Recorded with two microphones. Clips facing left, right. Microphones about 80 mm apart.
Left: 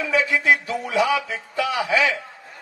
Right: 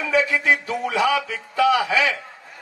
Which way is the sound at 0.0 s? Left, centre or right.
Right.